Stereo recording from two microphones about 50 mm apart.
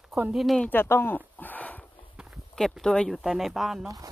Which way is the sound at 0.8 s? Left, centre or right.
Left.